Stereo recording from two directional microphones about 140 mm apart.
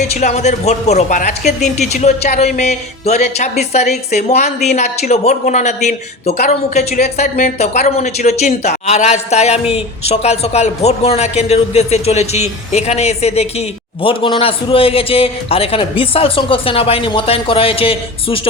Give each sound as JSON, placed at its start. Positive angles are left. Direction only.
{"t": 0.1, "sound": "a woman's voice", "side_deg": 55}